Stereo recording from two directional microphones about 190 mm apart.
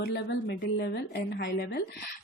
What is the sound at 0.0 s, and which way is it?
A woman's voice, 60° left (ahead or behind).